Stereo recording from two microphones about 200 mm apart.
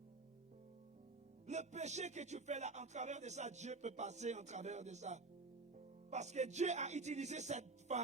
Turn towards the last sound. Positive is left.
turn(degrees=-35)  # may be behind; listen again after turning